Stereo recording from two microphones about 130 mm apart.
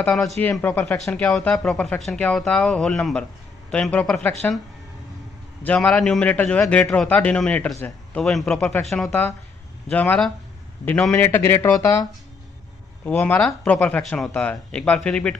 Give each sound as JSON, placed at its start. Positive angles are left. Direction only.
{"t": 0.4, "sound": "speech", "side_deg": 15}
{"t": 5.6, "sound": "a man's voice", "side_deg": 10}
{"t": 8.8, "sound": "speech", "side_deg": 0}